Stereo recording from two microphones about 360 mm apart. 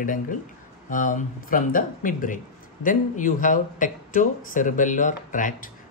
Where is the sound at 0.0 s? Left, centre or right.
Left.